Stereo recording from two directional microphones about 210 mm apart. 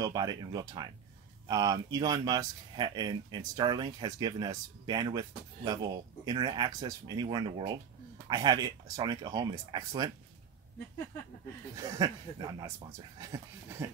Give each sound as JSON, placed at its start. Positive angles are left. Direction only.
{"t": 0.0, "sound": "speech", "side_deg": -20}
{"t": 11.7, "sound": "speech", "side_deg": -15}